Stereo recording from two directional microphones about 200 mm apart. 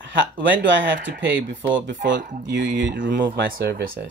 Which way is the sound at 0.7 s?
65° right (ahead or behind).